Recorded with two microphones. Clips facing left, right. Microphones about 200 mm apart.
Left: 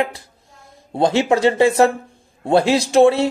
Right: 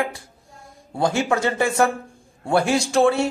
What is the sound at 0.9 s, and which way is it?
A man's voice, 20° left (ahead or behind).